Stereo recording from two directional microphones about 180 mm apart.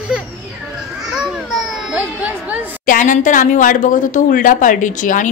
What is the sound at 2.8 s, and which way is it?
A woman's voice, 45° left (ahead or behind).